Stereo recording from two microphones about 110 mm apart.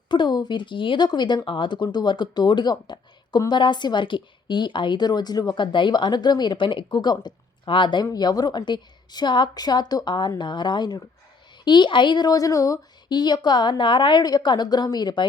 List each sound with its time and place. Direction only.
0.1 s a woman's voice: 40° left (ahead or behind)